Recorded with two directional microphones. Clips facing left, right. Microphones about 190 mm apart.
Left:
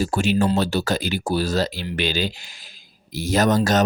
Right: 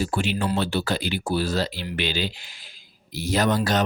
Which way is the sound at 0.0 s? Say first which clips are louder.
Left 5 dB; 45° left (ahead or behind).